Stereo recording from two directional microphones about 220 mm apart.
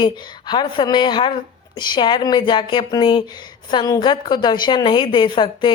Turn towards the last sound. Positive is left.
turn(degrees=20)  # may be behind; listen again after turning